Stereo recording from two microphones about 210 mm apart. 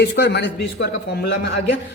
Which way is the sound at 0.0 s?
55° left (ahead or behind).